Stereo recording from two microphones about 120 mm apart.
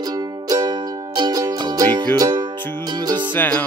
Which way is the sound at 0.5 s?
35° right (ahead or behind).